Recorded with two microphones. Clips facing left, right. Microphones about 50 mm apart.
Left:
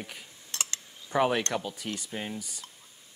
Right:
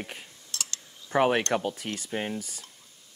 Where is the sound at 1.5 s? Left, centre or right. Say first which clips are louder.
Right 4 dB; right.